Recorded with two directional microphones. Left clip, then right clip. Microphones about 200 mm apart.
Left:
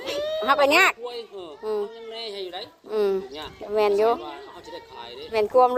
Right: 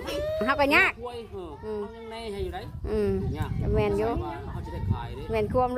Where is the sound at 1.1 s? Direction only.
40° right (ahead or behind).